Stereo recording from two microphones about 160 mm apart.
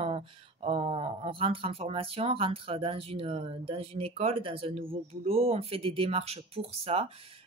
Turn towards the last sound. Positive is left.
turn(degrees=-35)  # may be behind; listen again after turning